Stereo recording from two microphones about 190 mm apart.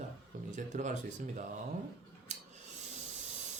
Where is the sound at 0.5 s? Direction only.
40° right (ahead or behind).